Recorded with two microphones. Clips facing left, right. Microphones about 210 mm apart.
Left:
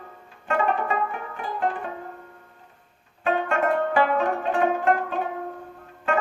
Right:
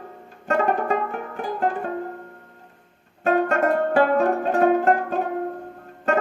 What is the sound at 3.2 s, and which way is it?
Music, 40° right (ahead or behind).